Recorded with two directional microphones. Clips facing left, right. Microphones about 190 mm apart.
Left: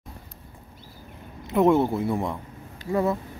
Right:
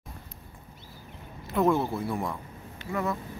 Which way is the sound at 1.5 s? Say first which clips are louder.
Left 5 dB; 20° left (ahead or behind).